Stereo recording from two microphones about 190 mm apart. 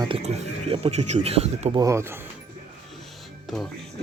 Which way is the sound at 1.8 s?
15° right (ahead or behind).